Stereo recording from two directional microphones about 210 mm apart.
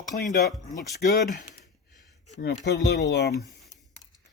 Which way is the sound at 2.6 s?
55° left (ahead or behind).